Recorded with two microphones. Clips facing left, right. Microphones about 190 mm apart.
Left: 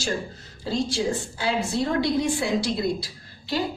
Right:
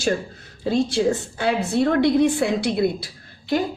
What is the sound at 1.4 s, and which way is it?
A woman's voice, 60° right (ahead or behind).